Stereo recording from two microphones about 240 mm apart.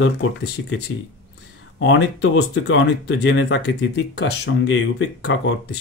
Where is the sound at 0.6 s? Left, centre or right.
Left.